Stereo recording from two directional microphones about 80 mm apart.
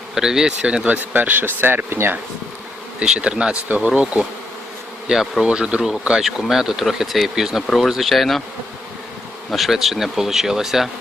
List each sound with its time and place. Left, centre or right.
0.1 s speech: centre; by 2.1 s right
3.0 s speech: centre
5.0 s speech: centre
9.5 s speech: centre